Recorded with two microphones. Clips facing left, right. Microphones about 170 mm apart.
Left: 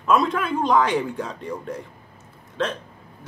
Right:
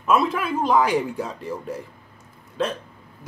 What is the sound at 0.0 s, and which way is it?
Speech, 5° right (ahead or behind).